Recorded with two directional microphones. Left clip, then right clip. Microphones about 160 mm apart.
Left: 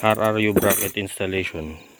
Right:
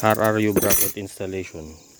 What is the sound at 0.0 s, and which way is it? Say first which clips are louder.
Speech: even; 50° right (ahead or behind).